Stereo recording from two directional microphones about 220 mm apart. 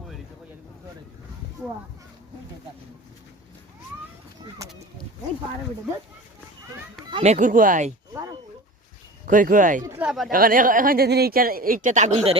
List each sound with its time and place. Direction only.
7.1 s speech: 30° right (ahead or behind)
8.1 s a sound: 15° right (ahead or behind)
9.2 s speech: 35° right (ahead or behind)
9.8 s a man's voice: 10° right (ahead or behind)
10.3 s speech: 40° right (ahead or behind)